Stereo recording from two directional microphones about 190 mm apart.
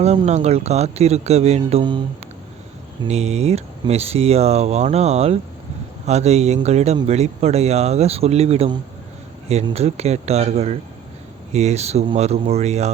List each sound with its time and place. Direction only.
0.3 s speech: 35° right (ahead or behind)
3.1 s speech: 35° right (ahead or behind)